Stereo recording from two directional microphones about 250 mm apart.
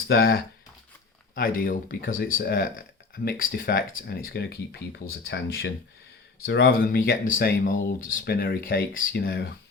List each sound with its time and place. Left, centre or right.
0.1 s speech: left